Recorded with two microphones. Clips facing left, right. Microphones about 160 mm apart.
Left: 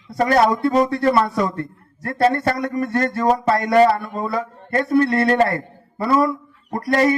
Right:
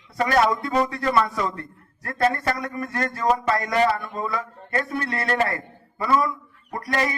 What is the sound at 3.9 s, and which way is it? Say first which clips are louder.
Speech: left 4 dB; 35° left (ahead or behind).